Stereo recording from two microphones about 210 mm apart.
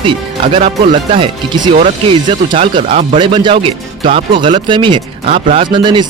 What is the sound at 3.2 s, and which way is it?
Speech, 25° right (ahead or behind).